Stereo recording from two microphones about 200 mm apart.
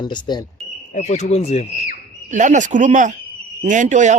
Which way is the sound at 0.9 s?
35° left (ahead or behind).